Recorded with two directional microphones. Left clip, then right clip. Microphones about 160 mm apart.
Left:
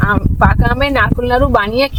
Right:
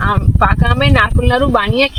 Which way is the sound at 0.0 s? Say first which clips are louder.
Left 1 dB; 20° left (ahead or behind).